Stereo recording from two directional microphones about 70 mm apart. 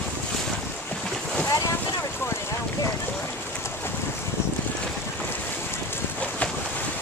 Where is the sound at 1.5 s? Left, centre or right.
Left.